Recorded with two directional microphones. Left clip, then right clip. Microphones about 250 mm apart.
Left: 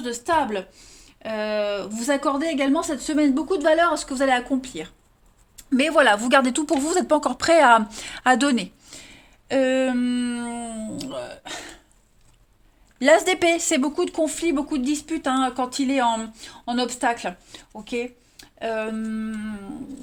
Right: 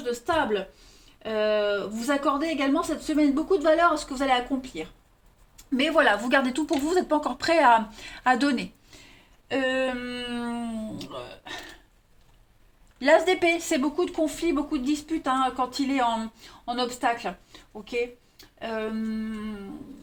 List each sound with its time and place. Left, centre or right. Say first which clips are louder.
0.0 s speech: left 3 dB; left
13.0 s speech: left 3 dB; left